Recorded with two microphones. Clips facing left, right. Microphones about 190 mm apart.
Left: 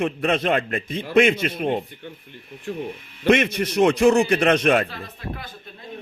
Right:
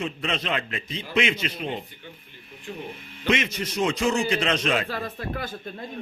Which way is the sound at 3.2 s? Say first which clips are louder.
Left 7 dB; 55° left (ahead or behind).